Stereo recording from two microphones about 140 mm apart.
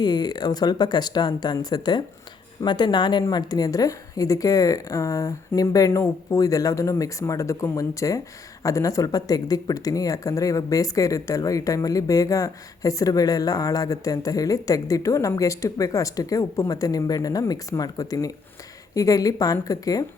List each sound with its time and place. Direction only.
0.0 s speech: 30° left (ahead or behind)